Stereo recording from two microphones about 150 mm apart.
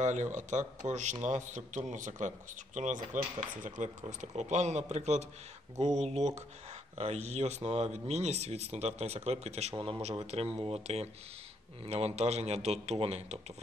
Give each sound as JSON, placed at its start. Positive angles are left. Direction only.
{"t": 0.0, "sound": "speech", "side_deg": -55}
{"t": 9.8, "sound": "speech", "side_deg": -30}